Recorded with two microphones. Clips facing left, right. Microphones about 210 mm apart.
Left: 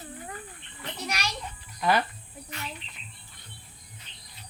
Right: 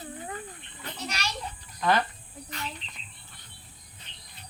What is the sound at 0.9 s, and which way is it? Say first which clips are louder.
Children playing: left 3 dB; 10° left (ahead or behind).